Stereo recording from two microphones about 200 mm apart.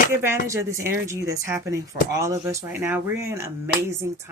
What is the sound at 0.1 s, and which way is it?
Speech, 10° right (ahead or behind).